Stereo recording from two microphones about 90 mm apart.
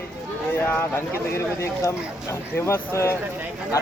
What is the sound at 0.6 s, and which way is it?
Speech, 25° left (ahead or behind).